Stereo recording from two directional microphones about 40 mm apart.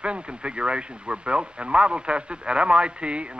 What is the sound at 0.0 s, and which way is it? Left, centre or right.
Speech, right.